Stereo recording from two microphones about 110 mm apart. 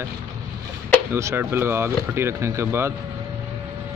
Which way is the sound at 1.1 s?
25° right (ahead or behind).